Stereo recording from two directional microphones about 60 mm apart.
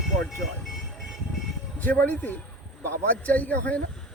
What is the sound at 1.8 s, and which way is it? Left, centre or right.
Speech, left.